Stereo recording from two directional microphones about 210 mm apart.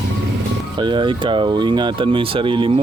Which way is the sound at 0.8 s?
20° right (ahead or behind).